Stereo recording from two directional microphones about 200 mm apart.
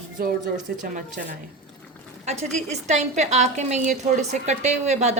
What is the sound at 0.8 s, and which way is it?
A woman's voice, 40° right (ahead or behind).